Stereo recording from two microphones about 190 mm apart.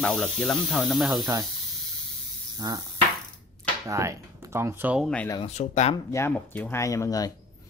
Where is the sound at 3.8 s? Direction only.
15° right (ahead or behind).